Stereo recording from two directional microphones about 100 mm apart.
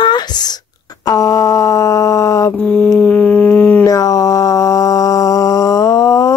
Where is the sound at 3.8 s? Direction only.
35° left (ahead or behind).